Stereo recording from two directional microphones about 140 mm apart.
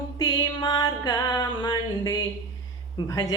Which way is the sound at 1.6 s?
30° left (ahead or behind).